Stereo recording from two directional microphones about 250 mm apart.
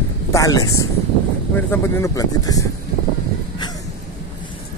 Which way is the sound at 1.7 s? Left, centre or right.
Centre.